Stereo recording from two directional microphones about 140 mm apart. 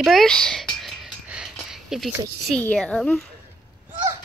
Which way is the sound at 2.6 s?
5° left (ahead or behind).